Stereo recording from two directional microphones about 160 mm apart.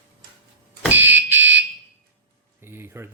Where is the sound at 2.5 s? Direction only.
15° right (ahead or behind).